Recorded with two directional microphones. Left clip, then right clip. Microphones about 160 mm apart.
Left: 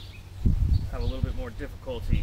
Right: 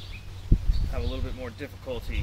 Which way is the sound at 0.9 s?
35° right (ahead or behind).